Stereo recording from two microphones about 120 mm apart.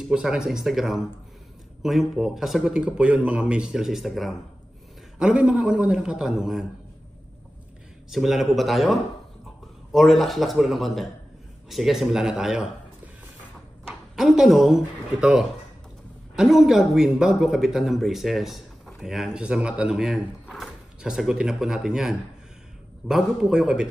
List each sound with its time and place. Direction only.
0.0 s speech: 5° right (ahead or behind)
8.1 s speech: centre (ahead or behind)
13.8 s speech: centre (ahead or behind)